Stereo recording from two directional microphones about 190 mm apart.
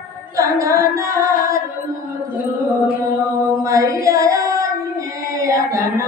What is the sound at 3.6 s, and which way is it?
Child singing, 15° right (ahead or behind).